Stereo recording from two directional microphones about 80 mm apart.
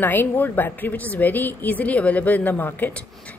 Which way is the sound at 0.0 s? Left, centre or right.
Left.